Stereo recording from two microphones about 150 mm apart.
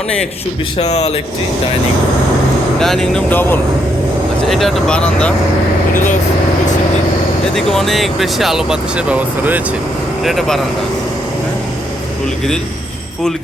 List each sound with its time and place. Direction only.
0.8 s speech: 45° left (ahead or behind)
2.7 s speech: 5° left (ahead or behind)
4.4 s speech: centre (ahead or behind)
7.5 s speech: centre (ahead or behind)